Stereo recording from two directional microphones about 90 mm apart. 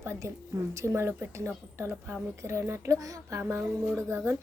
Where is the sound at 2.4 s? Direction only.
30° right (ahead or behind).